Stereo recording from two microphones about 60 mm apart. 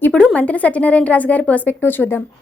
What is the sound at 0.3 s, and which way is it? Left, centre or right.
A woman's voice, left.